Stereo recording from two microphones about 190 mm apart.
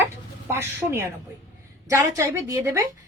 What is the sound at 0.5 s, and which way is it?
Speech, 15° right (ahead or behind).